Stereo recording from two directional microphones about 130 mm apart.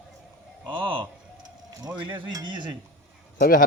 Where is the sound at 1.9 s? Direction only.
35° right (ahead or behind).